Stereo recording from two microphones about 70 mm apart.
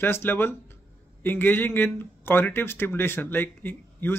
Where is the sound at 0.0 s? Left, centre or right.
Left.